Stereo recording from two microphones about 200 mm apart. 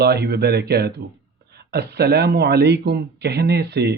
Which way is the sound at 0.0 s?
55° right (ahead or behind).